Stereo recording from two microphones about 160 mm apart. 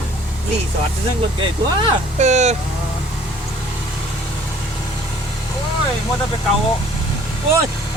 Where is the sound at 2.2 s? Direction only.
45° right (ahead or behind).